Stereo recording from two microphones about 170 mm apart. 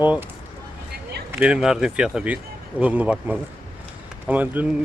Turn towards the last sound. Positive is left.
turn(degrees=-10)  # may be behind; listen again after turning